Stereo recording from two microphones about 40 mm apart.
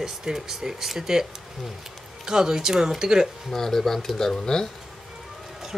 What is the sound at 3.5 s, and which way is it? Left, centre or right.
Speech, centre.